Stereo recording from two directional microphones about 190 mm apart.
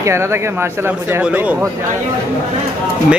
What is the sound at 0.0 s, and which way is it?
Speech, 15° right (ahead or behind).